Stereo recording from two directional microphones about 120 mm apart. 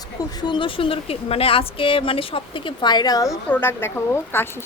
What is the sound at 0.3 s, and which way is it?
Speech, 40° left (ahead or behind).